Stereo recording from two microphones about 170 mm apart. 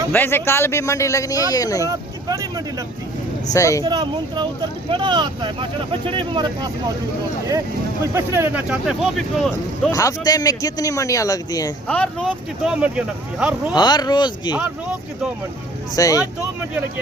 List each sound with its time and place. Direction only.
0.1 s a man's voice: 10° left (ahead or behind)
1.8 s speech: 20° right (ahead or behind)
3.5 s speech: 20° left (ahead or behind)
3.8 s speech: 25° right (ahead or behind)
8.1 s speech: 15° right (ahead or behind)
9.9 s speech: 20° left (ahead or behind)
11.9 s a man's voice: 5° left (ahead or behind)
12.6 s speech: 5° right (ahead or behind)
13.7 s speech: 25° left (ahead or behind)
14.5 s speech: 5° right (ahead or behind)
16.0 s speech: 20° left (ahead or behind)